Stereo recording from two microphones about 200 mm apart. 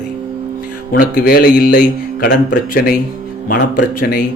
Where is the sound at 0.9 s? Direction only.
55° left (ahead or behind).